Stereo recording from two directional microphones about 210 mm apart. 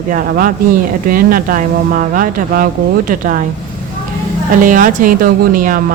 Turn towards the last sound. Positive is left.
turn(degrees=-40)  # may be behind; listen again after turning